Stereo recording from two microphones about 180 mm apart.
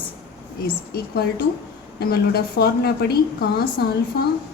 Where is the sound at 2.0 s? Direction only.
60° left (ahead or behind).